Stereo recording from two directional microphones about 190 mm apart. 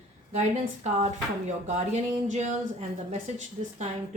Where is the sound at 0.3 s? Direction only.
35° right (ahead or behind).